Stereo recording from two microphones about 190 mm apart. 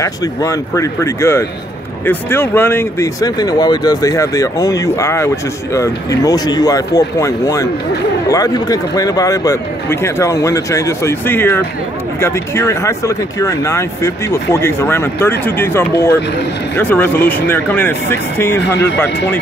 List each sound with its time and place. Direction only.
0.0 s speech: 20° left (ahead or behind)
19.0 s speech: 65° left (ahead or behind)